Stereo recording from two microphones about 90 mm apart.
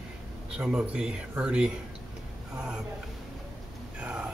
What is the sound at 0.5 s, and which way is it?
Speech, 10° right (ahead or behind).